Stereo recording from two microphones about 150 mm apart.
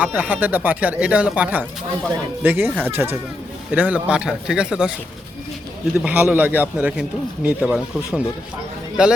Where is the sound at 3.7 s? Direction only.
10° right (ahead or behind).